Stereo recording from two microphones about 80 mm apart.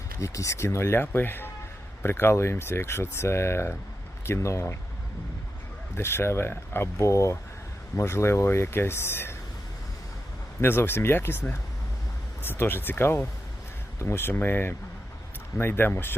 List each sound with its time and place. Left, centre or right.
0.2 s speech: left
6.0 s speech: left
7.0 s speech: left
10.6 s speech: left
12.4 s speech: left